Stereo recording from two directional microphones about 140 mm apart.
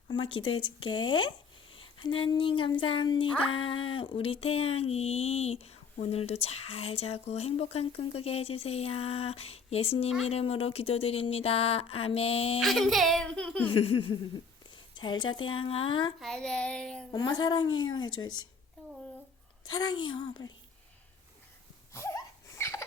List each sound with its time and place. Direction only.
0.1 s a woman's voice: 40° left (ahead or behind)
12.5 s speech: centre (ahead or behind)
13.7 s a woman's voice: 40° left (ahead or behind)
16.2 s speech: 5° left (ahead or behind)
17.1 s a woman's voice: 30° left (ahead or behind)
19.7 s a woman's voice: 30° left (ahead or behind)
21.9 s a sound: 20° left (ahead or behind)